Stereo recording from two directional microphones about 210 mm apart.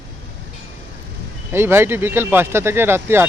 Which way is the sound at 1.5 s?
10° right (ahead or behind).